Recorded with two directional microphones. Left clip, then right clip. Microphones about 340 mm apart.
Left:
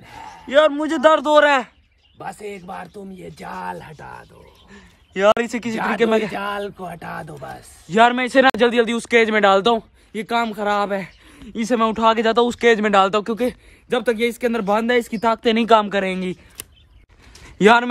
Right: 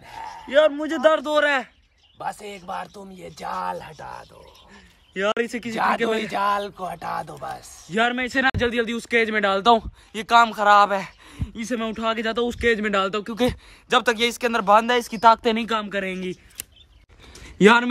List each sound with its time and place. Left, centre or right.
0.0 s a sound: right
0.5 s speech: centre
2.1 s speech: centre
5.1 s speech: centre
6.3 s speech: centre
7.9 s speech: centre
10.1 s speech: centre
11.6 s speech: centre
13.5 s speech: centre
15.5 s speech: centre
17.6 s speech: centre